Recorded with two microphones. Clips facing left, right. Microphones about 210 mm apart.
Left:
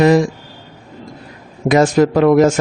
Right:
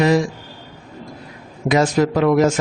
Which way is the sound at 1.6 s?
50° left (ahead or behind).